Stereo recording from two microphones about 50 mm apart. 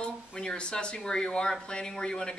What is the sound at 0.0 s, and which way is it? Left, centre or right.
Speech, centre.